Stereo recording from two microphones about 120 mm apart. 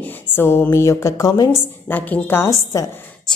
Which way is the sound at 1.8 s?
15° left (ahead or behind).